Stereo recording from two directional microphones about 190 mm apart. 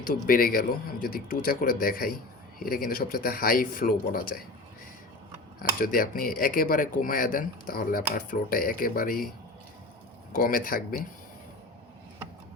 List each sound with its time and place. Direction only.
0.0 s speech: 50° left (ahead or behind)
5.8 s speech: 50° left (ahead or behind)
10.3 s speech: 50° left (ahead or behind)